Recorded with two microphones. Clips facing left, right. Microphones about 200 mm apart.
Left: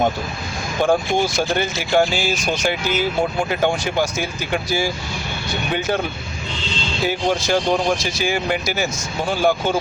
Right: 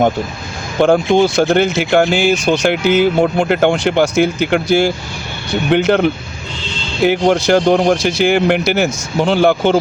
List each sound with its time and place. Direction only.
0.8 s speech: 70° right (ahead or behind)